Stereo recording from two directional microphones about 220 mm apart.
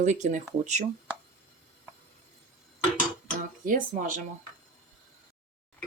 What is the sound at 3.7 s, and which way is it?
Speech, 40° right (ahead or behind).